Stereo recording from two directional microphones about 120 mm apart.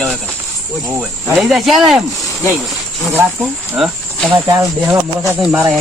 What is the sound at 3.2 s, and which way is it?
Speech, 20° right (ahead or behind).